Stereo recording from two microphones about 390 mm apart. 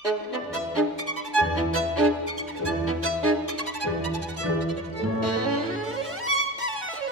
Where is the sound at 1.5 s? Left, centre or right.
Right.